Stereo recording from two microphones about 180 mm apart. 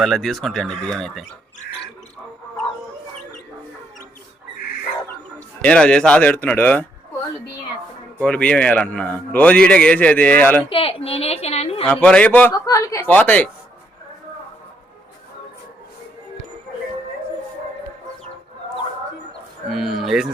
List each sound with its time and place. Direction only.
0.0 s speech: centre (ahead or behind)
5.6 s a man's voice: 5° left (ahead or behind)
8.2 s a man's voice: 5° left (ahead or behind)
10.7 s a woman's voice: 30° left (ahead or behind)
11.9 s a man's voice: 5° left (ahead or behind)
19.7 s speech: centre (ahead or behind)